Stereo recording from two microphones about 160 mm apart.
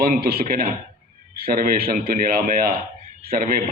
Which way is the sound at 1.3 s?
65° right (ahead or behind).